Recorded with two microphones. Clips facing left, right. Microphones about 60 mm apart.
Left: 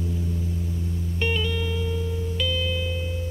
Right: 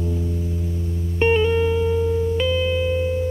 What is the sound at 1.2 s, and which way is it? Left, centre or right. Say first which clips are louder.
Music: right 10 dB; right.